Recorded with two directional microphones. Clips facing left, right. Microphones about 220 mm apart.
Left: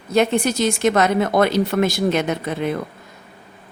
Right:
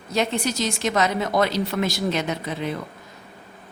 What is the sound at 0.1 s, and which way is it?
Speech, 55° left (ahead or behind).